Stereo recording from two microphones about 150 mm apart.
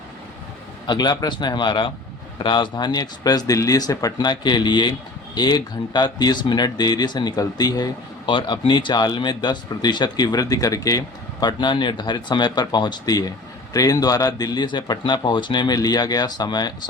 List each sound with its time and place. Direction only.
0.9 s speech: 30° left (ahead or behind)